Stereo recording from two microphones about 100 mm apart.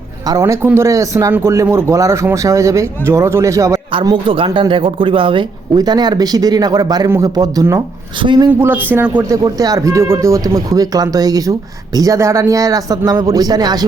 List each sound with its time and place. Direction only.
0.3 s speech: 35° right (ahead or behind)
4.1 s speech: 55° right (ahead or behind)
5.7 s speech: 45° right (ahead or behind)
8.2 s speech: 50° right (ahead or behind)
8.4 s speech: 20° right (ahead or behind)
9.3 s speech: 40° right (ahead or behind)